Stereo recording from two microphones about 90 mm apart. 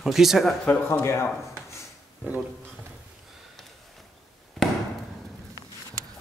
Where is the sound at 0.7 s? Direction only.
25° left (ahead or behind).